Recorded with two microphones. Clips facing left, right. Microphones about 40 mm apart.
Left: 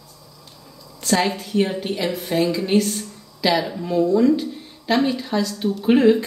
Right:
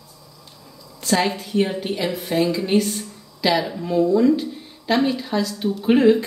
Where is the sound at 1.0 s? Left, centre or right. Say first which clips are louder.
Even; centre.